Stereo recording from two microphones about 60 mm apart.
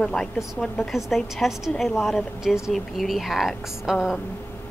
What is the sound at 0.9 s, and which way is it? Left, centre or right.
A woman's voice, centre.